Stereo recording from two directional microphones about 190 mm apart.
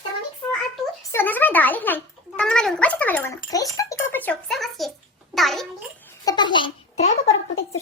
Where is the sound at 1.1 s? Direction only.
10° left (ahead or behind).